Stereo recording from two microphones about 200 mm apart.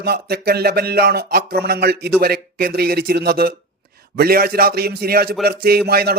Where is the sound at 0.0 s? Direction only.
50° right (ahead or behind).